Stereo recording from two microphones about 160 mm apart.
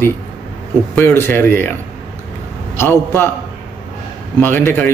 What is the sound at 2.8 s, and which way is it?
Speech, 15° left (ahead or behind).